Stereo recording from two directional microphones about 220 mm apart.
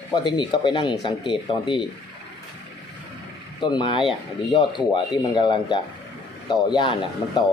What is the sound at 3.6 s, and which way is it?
Speech, 20° left (ahead or behind).